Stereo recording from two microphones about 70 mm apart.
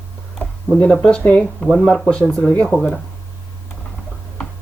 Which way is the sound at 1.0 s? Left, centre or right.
Centre.